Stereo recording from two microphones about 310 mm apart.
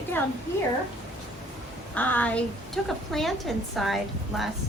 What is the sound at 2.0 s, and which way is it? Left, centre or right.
A woman's voice, centre.